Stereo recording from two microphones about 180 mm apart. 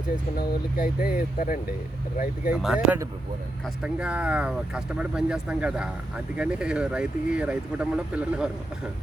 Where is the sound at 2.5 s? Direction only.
5° right (ahead or behind).